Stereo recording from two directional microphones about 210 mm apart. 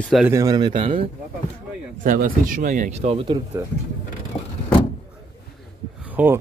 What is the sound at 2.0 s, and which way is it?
A man's voice, 40° right (ahead or behind).